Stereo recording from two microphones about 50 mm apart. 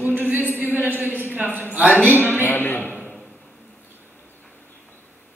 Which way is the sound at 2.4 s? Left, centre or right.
Left.